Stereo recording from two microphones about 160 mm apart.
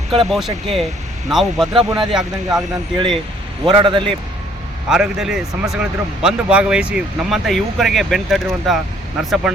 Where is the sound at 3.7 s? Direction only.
30° right (ahead or behind).